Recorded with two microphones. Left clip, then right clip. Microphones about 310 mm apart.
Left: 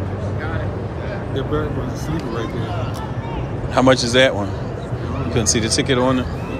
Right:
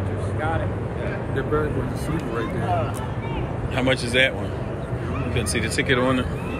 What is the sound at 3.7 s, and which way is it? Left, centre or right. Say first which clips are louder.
Speech: left 8 dB; left.